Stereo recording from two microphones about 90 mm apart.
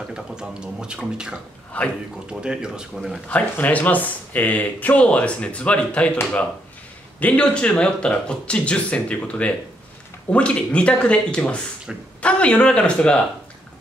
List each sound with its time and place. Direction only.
0.1 s speech: 10° right (ahead or behind)
1.7 s speech: 15° left (ahead or behind)
2.2 s speech: 10° right (ahead or behind)
3.3 s speech: 20° left (ahead or behind)
7.2 s speech: 15° left (ahead or behind)